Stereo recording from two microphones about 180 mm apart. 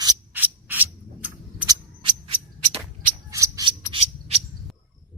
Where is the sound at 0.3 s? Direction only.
10° right (ahead or behind).